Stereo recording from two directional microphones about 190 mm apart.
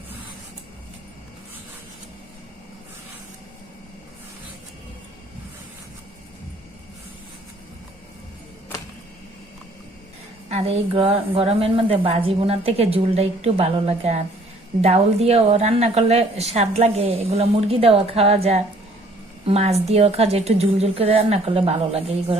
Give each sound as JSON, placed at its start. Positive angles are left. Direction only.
{"t": 10.5, "sound": "a woman's voice", "side_deg": -30}
{"t": 19.5, "sound": "a woman's voice", "side_deg": -35}